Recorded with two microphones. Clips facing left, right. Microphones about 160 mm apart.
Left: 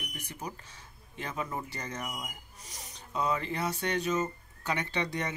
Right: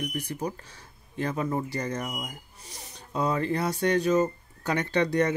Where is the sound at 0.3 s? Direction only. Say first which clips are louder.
Right 8 dB; 35° right (ahead or behind).